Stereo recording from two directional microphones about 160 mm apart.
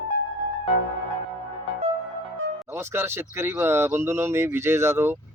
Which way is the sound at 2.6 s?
15° right (ahead or behind).